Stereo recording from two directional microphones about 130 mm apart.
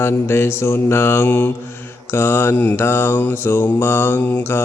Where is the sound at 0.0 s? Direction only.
20° left (ahead or behind).